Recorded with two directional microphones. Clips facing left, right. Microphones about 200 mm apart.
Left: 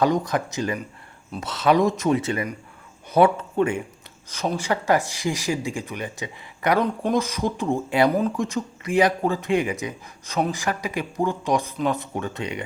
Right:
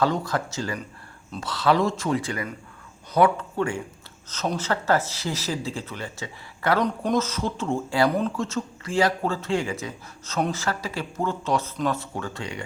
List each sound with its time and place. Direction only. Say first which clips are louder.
0.0 s speech: left 3 dB; 15° left (ahead or behind)